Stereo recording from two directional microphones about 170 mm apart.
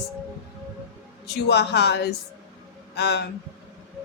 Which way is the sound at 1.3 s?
75° left (ahead or behind).